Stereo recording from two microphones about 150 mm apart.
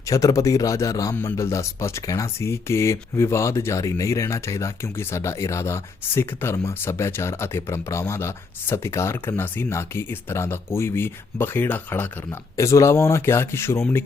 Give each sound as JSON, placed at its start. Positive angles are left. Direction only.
{"t": 0.0, "sound": "speech", "side_deg": 20}